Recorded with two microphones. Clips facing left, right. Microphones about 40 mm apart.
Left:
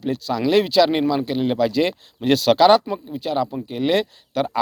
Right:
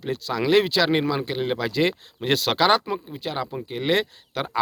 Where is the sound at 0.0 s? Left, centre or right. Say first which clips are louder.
Left 3 dB; right.